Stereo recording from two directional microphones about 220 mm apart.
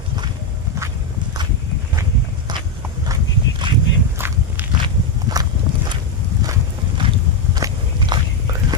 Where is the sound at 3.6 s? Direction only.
20° right (ahead or behind).